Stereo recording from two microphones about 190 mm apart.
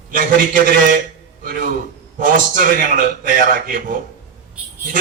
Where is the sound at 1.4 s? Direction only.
50° right (ahead or behind).